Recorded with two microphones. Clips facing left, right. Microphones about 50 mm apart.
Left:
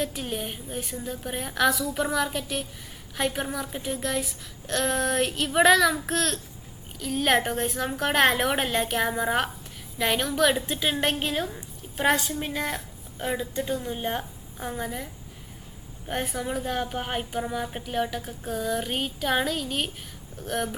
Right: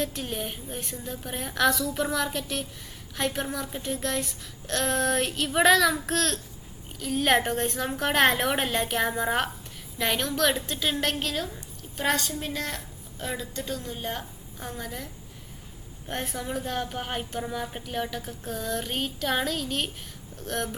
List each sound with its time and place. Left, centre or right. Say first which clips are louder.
0.0 s a woman's voice: left 1 dB; centre